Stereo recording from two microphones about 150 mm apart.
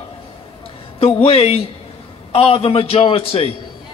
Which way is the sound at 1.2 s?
40° left (ahead or behind).